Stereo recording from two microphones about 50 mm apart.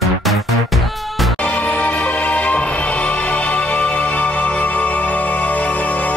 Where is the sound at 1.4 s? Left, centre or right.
Left.